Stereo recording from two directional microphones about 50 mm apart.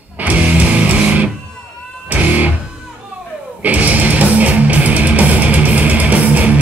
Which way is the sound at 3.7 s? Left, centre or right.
Right.